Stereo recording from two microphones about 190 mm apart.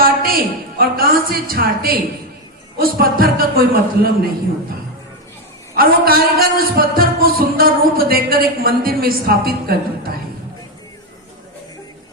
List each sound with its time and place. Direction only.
0.0 s a woman's voice: 50° right (ahead or behind)
5.7 s speech: 50° right (ahead or behind)